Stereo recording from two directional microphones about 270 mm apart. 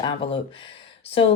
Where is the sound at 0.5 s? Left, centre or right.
Centre.